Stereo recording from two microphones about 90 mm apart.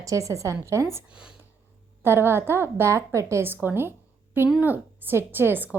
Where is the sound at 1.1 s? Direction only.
5° right (ahead or behind).